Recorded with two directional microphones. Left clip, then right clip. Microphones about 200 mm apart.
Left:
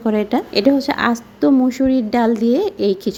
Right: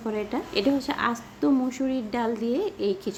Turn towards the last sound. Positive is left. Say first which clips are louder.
# left 9 dB
turn(degrees=35)  # may be behind; listen again after turning